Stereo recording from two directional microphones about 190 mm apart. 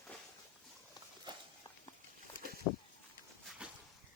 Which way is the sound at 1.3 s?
25° right (ahead or behind).